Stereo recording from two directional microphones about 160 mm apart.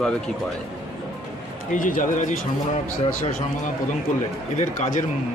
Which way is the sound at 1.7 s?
55° left (ahead or behind).